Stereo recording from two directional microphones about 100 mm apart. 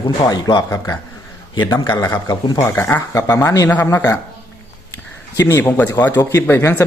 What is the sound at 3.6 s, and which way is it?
Speech, 15° left (ahead or behind).